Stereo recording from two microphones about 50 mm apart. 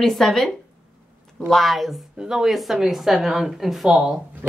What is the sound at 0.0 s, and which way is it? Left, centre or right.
Speech, centre.